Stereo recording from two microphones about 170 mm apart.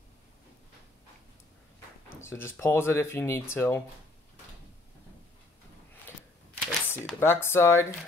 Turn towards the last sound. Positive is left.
turn(degrees=15)  # may be behind; listen again after turning